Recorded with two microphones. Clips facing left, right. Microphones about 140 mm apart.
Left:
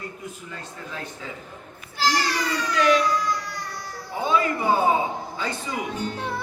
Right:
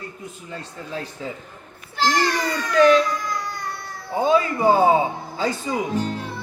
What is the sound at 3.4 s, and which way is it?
Music, 50° right (ahead or behind).